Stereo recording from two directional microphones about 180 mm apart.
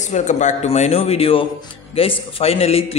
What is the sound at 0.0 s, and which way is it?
A man's voice, 40° left (ahead or behind).